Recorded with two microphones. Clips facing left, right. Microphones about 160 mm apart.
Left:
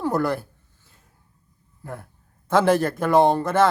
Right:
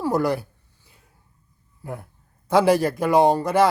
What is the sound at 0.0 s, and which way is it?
Speech, 10° right (ahead or behind).